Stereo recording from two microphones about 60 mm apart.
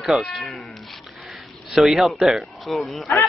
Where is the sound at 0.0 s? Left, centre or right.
Centre.